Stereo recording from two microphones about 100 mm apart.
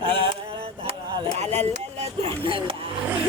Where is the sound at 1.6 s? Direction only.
90° right; by 2.8 s 60° right (ahead or behind).